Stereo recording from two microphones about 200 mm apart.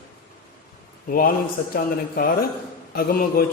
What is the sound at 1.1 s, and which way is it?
A man's voice, 45° left (ahead or behind).